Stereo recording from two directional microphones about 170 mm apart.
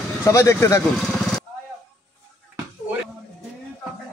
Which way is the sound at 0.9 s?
Centre (ahead or behind).